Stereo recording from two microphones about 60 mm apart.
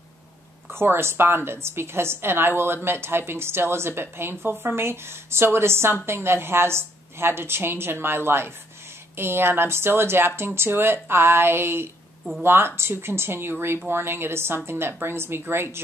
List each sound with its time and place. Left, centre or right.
0.7 s a woman's voice: right